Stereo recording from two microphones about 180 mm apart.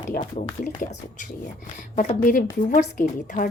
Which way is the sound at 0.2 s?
40° left (ahead or behind).